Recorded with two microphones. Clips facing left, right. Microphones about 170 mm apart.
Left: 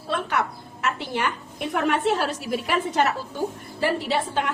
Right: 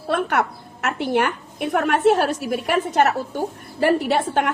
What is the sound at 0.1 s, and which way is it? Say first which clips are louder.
A woman's voice: right 5 dB; 55° right (ahead or behind).